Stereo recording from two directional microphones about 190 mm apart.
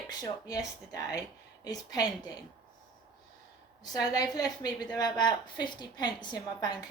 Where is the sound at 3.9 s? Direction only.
20° left (ahead or behind).